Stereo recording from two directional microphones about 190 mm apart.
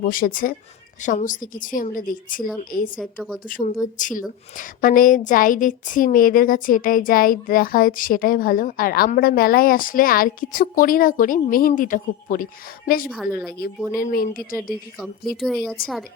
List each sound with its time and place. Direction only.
0.0 s a woman's voice: 50° left (ahead or behind)
3.0 s speech: 5° left (ahead or behind)
3.4 s a woman's voice: 45° left (ahead or behind)
13.9 s a woman's voice: 50° left (ahead or behind)
14.9 s speech: centre (ahead or behind)